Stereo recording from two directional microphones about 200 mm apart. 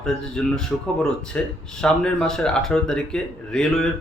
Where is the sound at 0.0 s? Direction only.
5° left (ahead or behind).